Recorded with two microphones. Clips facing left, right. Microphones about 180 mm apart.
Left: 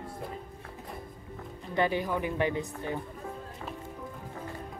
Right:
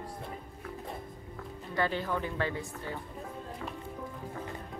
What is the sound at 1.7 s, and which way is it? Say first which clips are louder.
Speech: left 3 dB; 15° left (ahead or behind).